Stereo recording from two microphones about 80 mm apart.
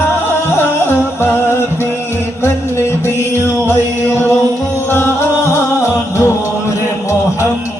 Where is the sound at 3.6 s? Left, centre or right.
Left.